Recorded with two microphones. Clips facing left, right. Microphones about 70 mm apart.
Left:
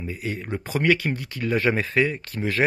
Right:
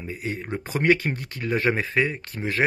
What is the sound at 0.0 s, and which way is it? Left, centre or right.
Speech, right.